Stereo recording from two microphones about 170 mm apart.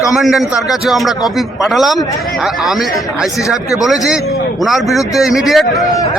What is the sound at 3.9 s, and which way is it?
A man's voice, centre (ahead or behind).